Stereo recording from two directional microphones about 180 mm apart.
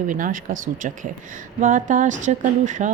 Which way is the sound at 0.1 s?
50° right (ahead or behind).